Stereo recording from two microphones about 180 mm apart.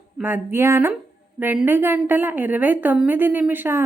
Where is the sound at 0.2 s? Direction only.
10° right (ahead or behind).